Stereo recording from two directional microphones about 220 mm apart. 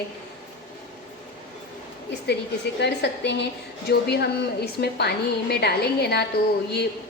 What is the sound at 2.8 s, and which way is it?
A woman's voice, 50° left (ahead or behind).